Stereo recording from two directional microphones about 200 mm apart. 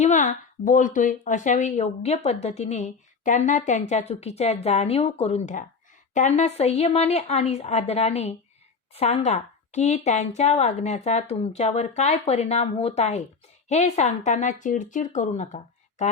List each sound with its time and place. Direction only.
0.0 s a woman's voice: 40° left (ahead or behind)